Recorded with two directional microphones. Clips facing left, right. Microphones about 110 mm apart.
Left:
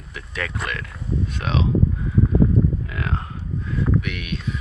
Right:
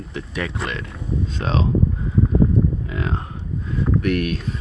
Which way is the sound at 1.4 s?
35° right (ahead or behind).